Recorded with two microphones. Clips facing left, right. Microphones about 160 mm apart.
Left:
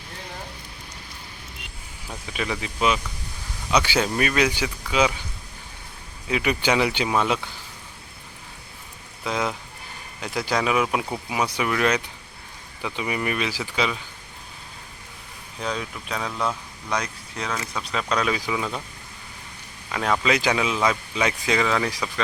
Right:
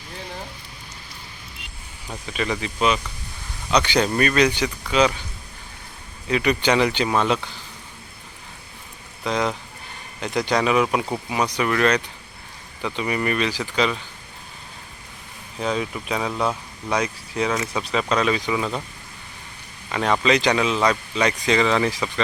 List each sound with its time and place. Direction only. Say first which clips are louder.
2.0 s speech: right 3 dB; 5° left (ahead or behind)
6.2 s speech: right 3 dB; 10° left (ahead or behind)
9.2 s speech: right 3 dB; 5° left (ahead or behind)
15.6 s speech: right 5 dB; 5° right (ahead or behind)
19.9 s speech: right 3 dB; centre (ahead or behind)